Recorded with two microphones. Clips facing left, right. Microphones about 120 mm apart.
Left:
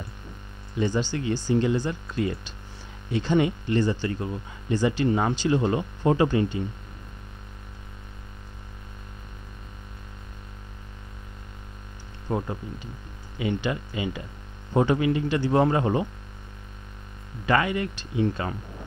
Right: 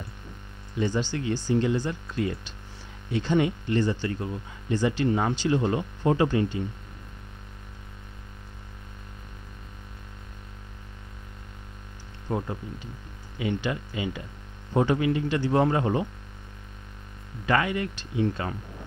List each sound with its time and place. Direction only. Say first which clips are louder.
0.7 s speech: left 1 dB; 20° left (ahead or behind)
12.3 s speech: left 1 dB; 30° left (ahead or behind)
13.4 s speech: left 1 dB; 20° left (ahead or behind)
17.5 s speech: left 1 dB; 20° left (ahead or behind)